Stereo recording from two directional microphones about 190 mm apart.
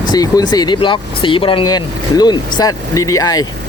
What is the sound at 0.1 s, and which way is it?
Speech, 20° left (ahead or behind).